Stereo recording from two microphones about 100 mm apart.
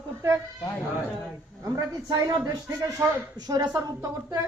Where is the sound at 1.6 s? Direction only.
40° right (ahead or behind).